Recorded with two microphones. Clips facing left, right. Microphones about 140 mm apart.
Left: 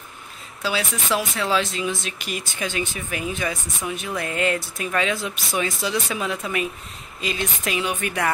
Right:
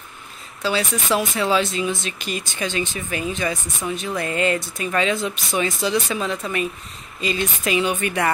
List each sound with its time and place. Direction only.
0.6 s speech: centre (ahead or behind)